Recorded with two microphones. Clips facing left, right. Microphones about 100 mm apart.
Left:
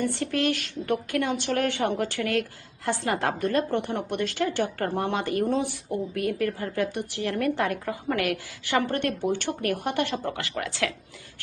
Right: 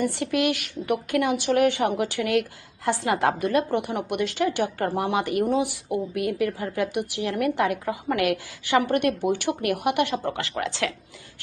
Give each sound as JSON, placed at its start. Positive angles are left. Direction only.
{"t": 0.0, "sound": "a woman's voice", "side_deg": -15}